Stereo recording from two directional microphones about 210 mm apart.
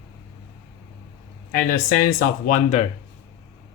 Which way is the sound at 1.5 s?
40° left (ahead or behind).